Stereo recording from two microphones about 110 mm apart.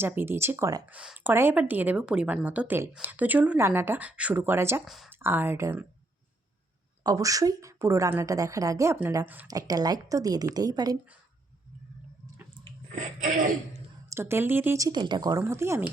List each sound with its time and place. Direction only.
0.0 s speech: 20° right (ahead or behind)
0.9 s a woman's voice: 10° right (ahead or behind)
7.0 s a woman's voice: 30° right (ahead or behind)
9.2 s a woman's voice: 15° right (ahead or behind)
9.5 s a woman's voice: 35° right (ahead or behind)
14.1 s speech: 25° right (ahead or behind)
14.8 s a woman's voice: 35° right (ahead or behind)